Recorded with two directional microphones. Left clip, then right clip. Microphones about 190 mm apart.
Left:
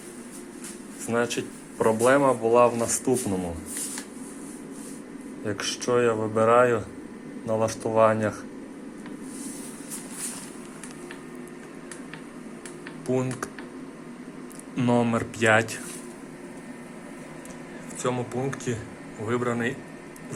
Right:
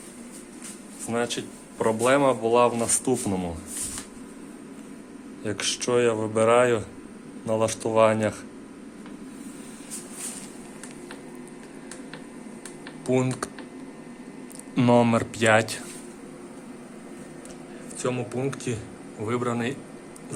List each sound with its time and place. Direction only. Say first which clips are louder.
1.0 s speech: left 2 dB; 5° right (ahead or behind); by 3.5 s 25° right (ahead or behind)
5.5 s speech: right 1 dB; 25° right (ahead or behind)
13.1 s speech: right 3 dB; 20° right (ahead or behind)
14.8 s speech: right 4 dB; 30° right (ahead or behind)
15.1 s speech: right 1 dB; 20° right (ahead or behind)
18.0 s speech: even; 10° right (ahead or behind)